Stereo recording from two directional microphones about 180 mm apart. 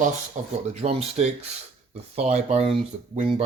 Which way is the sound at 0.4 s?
45° right (ahead or behind).